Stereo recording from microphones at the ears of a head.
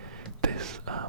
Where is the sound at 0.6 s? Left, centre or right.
Right.